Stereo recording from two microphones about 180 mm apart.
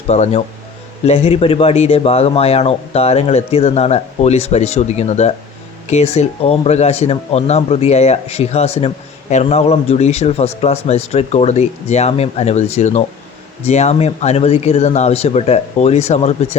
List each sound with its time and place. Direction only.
0.1 s speech: 35° left (ahead or behind)